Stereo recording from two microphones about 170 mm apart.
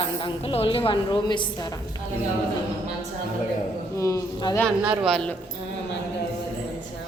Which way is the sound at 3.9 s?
20° left (ahead or behind).